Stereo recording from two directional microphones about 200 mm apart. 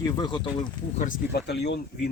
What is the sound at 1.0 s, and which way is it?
Speech, 45° left (ahead or behind).